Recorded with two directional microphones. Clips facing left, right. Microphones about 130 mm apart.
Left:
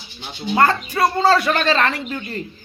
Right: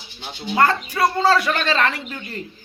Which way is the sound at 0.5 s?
30° left (ahead or behind).